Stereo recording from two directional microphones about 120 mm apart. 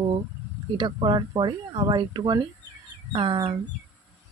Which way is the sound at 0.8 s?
40° right (ahead or behind).